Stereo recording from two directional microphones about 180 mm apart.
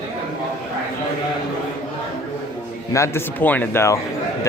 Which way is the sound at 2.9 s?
15° left (ahead or behind).